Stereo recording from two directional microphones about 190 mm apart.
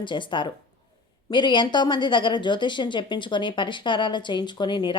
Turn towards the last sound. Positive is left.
turn(degrees=25)  # may be behind; listen again after turning